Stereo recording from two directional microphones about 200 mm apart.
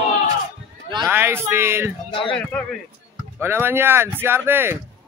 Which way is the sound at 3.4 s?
10° right (ahead or behind).